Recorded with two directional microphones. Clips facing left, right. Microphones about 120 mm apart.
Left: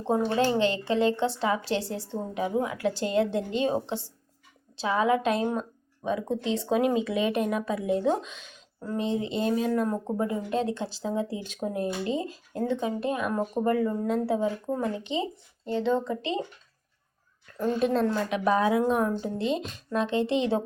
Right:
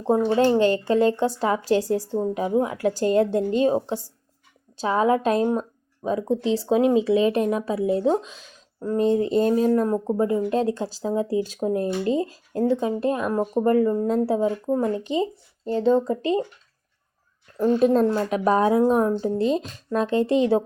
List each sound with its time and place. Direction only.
0.1 s speech: 35° right (ahead or behind)
9.0 s speech: 45° right (ahead or behind)
17.6 s speech: 40° right (ahead or behind)